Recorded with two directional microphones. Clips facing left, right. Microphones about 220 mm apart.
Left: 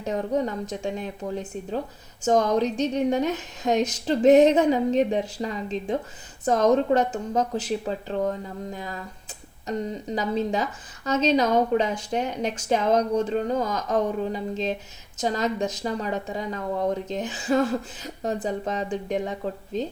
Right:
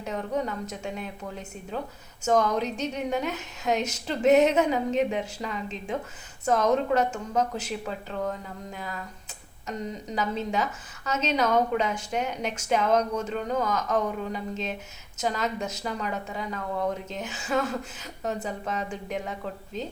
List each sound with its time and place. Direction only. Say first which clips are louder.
0.0 s a woman's voice: left 4 dB; 35° left (ahead or behind)